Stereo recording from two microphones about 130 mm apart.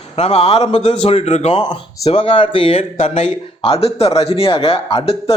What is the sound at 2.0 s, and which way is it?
Speech, 45° left (ahead or behind).